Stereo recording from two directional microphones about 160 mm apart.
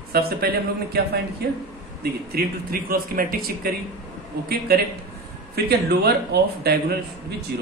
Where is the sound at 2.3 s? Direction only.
70° right (ahead or behind).